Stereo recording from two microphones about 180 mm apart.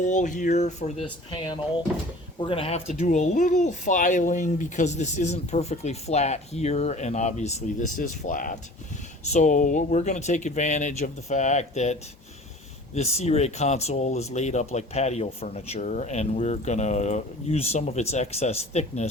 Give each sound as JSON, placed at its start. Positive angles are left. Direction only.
{"t": 0.0, "sound": "speech", "side_deg": 45}
{"t": 2.4, "sound": "speech", "side_deg": 30}